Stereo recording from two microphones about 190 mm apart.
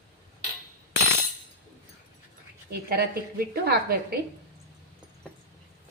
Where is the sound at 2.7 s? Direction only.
55° right (ahead or behind).